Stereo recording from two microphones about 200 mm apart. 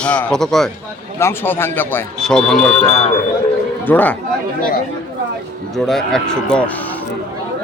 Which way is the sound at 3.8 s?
10° left (ahead or behind).